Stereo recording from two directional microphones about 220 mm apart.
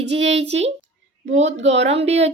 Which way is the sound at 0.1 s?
30° right (ahead or behind).